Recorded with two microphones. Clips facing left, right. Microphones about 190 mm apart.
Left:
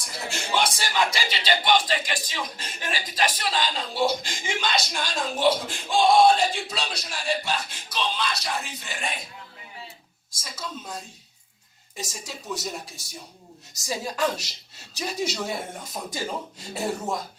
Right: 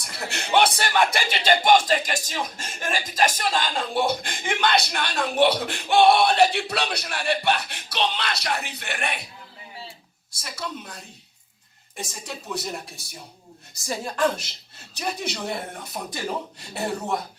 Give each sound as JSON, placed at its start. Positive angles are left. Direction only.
{"t": 0.0, "sound": "speech", "side_deg": -65}
{"t": 10.3, "sound": "speech", "side_deg": -65}